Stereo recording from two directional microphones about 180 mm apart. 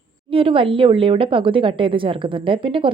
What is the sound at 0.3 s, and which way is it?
A woman's voice, 30° right (ahead or behind).